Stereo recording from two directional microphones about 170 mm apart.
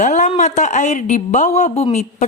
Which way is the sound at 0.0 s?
45° left (ahead or behind).